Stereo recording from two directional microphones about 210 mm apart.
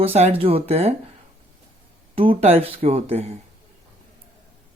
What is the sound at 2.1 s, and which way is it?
Speech, 25° right (ahead or behind).